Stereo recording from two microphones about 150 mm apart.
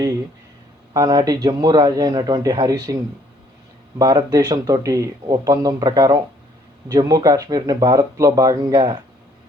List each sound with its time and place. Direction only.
0.9 s speech: 25° right (ahead or behind)